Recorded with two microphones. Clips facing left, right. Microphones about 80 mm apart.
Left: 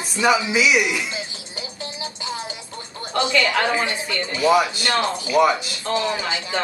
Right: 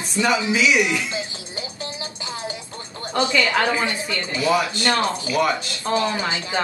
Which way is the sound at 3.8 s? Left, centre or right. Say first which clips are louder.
Even; left.